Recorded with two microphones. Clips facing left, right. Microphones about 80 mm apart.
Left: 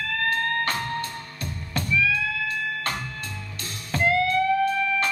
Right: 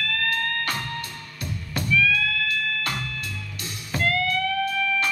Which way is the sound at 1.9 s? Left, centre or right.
Centre.